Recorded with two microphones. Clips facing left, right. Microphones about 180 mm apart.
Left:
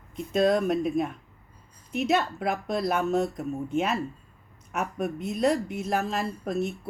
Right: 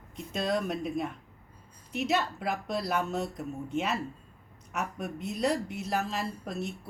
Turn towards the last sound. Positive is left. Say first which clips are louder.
# left 6 dB
turn(degrees=50)  # may be behind; listen again after turning